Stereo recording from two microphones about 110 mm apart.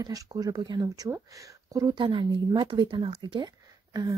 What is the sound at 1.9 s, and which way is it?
Speech, 50° right (ahead or behind).